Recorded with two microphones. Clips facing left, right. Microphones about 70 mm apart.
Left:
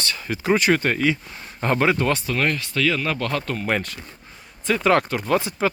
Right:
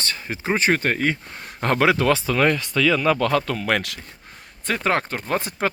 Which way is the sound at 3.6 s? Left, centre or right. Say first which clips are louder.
Right 1 dB; right.